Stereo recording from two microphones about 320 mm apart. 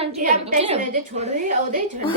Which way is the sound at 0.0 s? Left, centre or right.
Centre.